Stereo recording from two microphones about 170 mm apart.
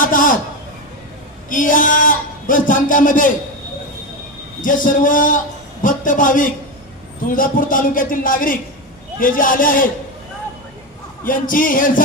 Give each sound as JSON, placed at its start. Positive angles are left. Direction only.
{"t": 0.0, "sound": "a sound", "side_deg": 50}
{"t": 1.5, "sound": "a man's voice", "side_deg": 50}
{"t": 4.6, "sound": "a man's voice", "side_deg": 50}
{"t": 11.2, "sound": "a man's voice", "side_deg": 55}